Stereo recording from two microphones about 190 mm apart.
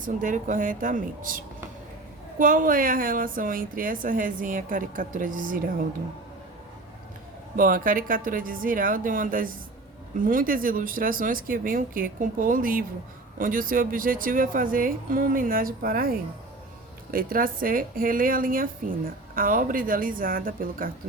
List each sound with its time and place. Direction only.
0.0 s speech: 45° right (ahead or behind)
2.4 s speech: 45° right (ahead or behind)
7.5 s speech: 45° right (ahead or behind)